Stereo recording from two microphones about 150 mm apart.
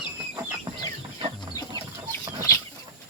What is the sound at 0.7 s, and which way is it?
Chicken, 30° right (ahead or behind).